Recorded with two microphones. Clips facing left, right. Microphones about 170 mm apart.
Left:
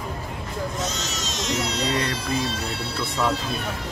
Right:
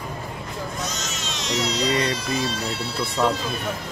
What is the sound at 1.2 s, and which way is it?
Music, 45° left (ahead or behind).